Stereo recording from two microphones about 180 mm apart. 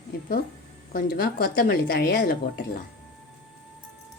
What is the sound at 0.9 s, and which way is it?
Speech, 50° left (ahead or behind).